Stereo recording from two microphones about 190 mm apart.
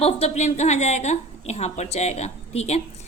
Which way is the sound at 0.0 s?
35° left (ahead or behind).